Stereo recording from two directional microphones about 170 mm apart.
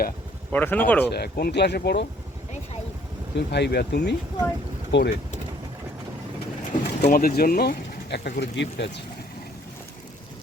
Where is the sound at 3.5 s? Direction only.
75° left (ahead or behind).